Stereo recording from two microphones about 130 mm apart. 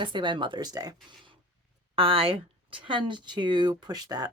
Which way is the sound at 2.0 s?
45° right (ahead or behind).